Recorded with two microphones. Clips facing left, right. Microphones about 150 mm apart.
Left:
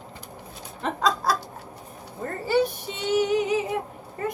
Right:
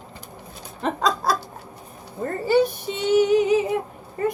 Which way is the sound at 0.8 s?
25° right (ahead or behind).